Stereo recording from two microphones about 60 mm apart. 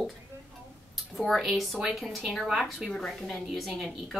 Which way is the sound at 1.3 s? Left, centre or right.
Centre.